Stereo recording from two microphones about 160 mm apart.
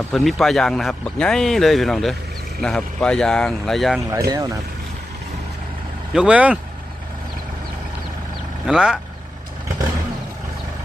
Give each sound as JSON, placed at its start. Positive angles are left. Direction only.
{"t": 0.1, "sound": "speech", "side_deg": 0}
{"t": 4.1, "sound": "speech", "side_deg": -20}
{"t": 6.1, "sound": "speech", "side_deg": -5}
{"t": 8.6, "sound": "speech", "side_deg": -5}